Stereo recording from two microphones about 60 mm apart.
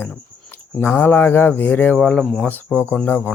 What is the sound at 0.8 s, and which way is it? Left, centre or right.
Speech, left.